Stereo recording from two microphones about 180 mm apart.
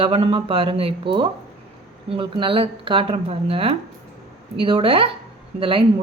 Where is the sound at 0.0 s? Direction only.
30° right (ahead or behind).